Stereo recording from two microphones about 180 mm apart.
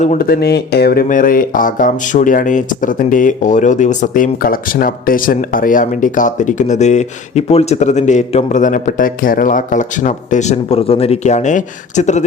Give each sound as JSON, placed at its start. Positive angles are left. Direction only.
{"t": 0.0, "sound": "speech", "side_deg": 40}
{"t": 0.3, "sound": "speech", "side_deg": 60}